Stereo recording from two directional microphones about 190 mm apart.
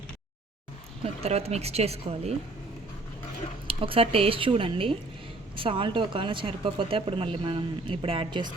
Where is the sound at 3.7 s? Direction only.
30° right (ahead or behind).